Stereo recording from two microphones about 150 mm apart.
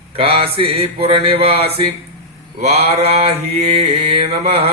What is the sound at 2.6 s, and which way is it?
Mantra, 45° right (ahead or behind).